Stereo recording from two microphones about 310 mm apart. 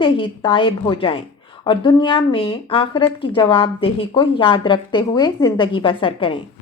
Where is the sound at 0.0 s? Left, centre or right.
Centre.